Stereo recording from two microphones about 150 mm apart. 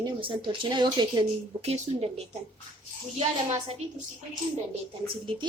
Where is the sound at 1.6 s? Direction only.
50° right (ahead or behind).